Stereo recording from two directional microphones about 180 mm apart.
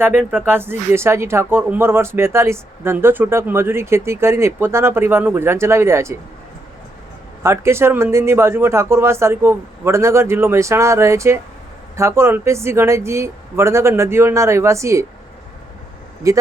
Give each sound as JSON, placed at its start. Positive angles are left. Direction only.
{"t": 0.0, "sound": "speech", "side_deg": -10}
{"t": 7.4, "sound": "speech", "side_deg": -15}
{"t": 16.2, "sound": "speech", "side_deg": -15}